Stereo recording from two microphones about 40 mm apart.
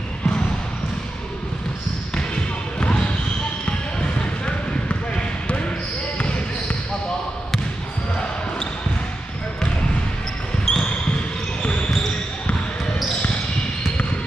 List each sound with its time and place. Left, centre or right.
3.6 s basketball bounce: left
10.6 s basketball bounce: centre